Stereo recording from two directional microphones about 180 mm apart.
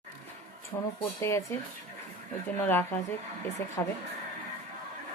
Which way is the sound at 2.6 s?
10° left (ahead or behind).